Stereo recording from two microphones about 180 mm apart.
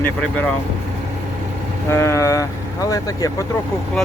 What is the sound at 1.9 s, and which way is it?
Speech, 15° left (ahead or behind).